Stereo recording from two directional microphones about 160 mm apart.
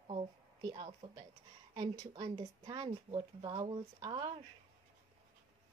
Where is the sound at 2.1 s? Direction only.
40° right (ahead or behind).